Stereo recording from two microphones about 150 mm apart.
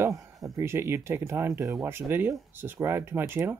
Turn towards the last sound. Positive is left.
turn(degrees=-15)  # may be behind; listen again after turning